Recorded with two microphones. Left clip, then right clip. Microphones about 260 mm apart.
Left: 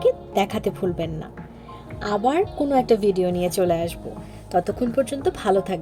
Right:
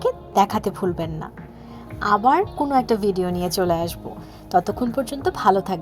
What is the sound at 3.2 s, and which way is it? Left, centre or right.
Speech, centre.